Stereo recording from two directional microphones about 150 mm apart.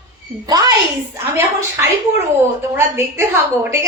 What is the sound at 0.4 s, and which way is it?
Speech, 25° right (ahead or behind).